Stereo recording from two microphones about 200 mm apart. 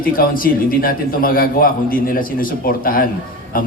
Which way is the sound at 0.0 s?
45° left (ahead or behind).